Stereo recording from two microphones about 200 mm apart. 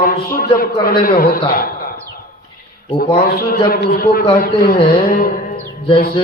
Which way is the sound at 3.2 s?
50° left (ahead or behind).